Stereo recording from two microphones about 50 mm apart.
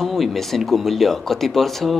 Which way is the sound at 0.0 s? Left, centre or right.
Centre.